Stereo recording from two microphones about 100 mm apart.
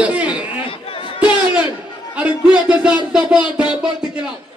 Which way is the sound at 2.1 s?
10° right (ahead or behind).